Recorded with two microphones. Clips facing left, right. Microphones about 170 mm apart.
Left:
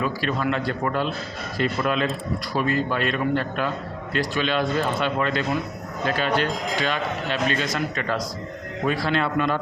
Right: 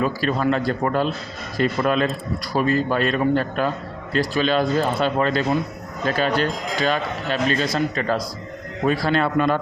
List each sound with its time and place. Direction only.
0.0 s speech: 40° right (ahead or behind)